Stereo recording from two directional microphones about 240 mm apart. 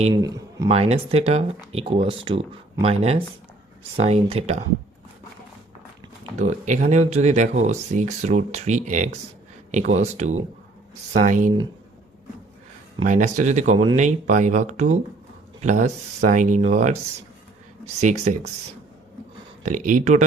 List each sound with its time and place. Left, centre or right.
0.1 s speech: centre
0.7 s speech: right
6.4 s speech: right
13.1 s speech: right
18.0 s speech: right
19.6 s speech: right